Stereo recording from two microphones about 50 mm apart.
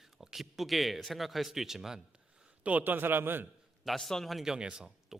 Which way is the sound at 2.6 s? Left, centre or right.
Right.